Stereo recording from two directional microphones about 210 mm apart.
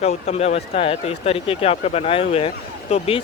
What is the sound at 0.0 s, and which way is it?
Speech, 30° left (ahead or behind).